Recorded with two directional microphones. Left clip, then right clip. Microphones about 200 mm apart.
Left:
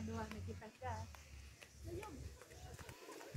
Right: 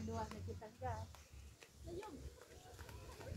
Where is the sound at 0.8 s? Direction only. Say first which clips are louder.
Right 1 dB; 40° right (ahead or behind).